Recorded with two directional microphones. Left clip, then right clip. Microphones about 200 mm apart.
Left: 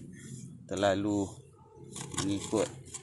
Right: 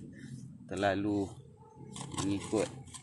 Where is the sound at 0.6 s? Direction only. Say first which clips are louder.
Left 3 dB; 10° left (ahead or behind).